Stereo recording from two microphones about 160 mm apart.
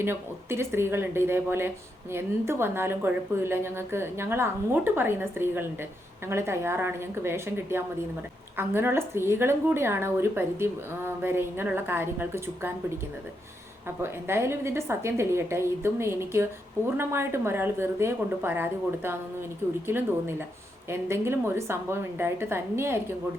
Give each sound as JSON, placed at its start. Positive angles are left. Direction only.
{"t": 0.0, "sound": "a woman's voice", "side_deg": -15}
{"t": 14.0, "sound": "a woman's voice", "side_deg": -15}
{"t": 20.9, "sound": "a woman's voice", "side_deg": -15}